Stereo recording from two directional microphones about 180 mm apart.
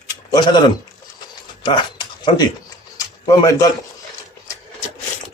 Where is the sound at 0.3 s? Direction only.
25° left (ahead or behind).